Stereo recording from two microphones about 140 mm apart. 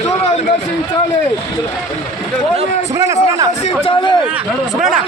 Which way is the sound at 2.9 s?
20° right (ahead or behind).